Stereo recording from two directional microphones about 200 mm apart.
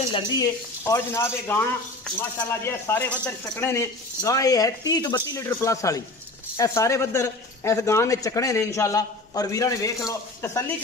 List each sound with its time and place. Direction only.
0.1 s speech: 15° left (ahead or behind)